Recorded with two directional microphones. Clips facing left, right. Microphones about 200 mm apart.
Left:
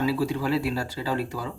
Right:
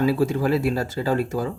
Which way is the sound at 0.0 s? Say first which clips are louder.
Right 5 dB; 45° right (ahead or behind).